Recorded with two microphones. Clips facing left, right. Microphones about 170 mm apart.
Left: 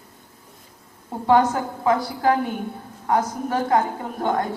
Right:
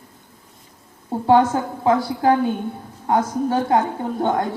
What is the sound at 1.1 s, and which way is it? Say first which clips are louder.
A woman's voice: right 2 dB; 30° right (ahead or behind).